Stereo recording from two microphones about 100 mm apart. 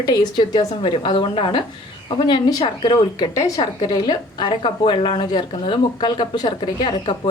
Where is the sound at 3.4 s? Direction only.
40° left (ahead or behind).